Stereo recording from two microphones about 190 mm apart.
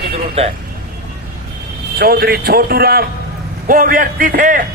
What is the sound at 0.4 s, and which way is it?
Speech, 30° right (ahead or behind).